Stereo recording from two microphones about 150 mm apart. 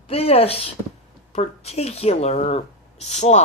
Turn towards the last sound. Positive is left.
turn(degrees=50)  # may be behind; listen again after turning